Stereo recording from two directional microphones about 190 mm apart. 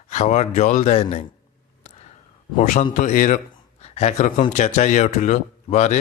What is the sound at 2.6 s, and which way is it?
Speech, 40° left (ahead or behind).